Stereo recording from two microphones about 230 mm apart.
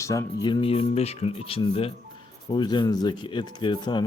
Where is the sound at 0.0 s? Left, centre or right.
Centre.